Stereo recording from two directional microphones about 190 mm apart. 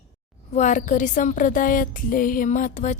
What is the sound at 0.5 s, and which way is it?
A woman's voice, 40° left (ahead or behind).